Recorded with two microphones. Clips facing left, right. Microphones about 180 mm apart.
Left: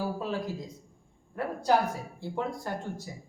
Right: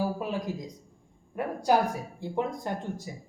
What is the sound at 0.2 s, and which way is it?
A man's voice, 15° right (ahead or behind).